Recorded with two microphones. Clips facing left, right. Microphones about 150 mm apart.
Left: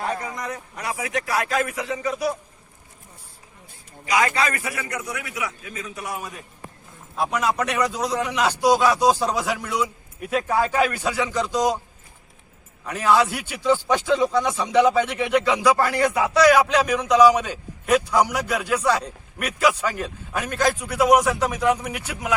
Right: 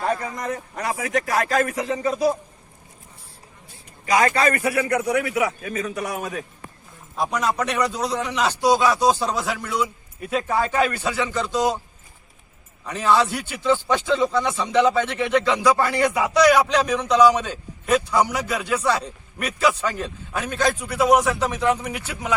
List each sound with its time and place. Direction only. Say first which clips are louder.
0.3 s speech: right 3 dB; 45° right (ahead or behind)
4.0 s speech: right 3 dB; 45° right (ahead or behind)
4.6 s a man's voice: right 9 dB; 55° right (ahead or behind)
7.2 s a man's voice: even; 5° left (ahead or behind)
12.8 s a man's voice: even; 5° left (ahead or behind)